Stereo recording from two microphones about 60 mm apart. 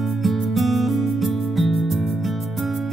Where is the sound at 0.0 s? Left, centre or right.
Centre.